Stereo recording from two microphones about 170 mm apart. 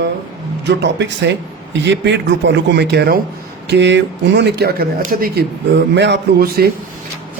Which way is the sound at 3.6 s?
90° right.